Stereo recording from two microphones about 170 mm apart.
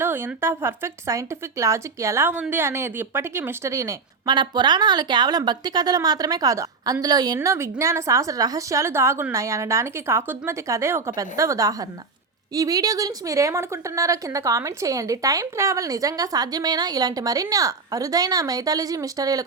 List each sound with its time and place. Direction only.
0.0 s a woman's voice: 10° right (ahead or behind)